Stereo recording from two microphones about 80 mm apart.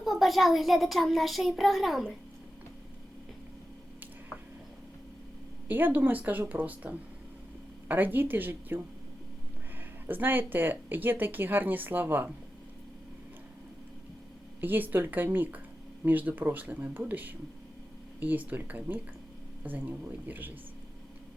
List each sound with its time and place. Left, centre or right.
0.0 s a child's voice: centre
5.6 s speech: right
10.1 s speech: right
14.6 s speech: right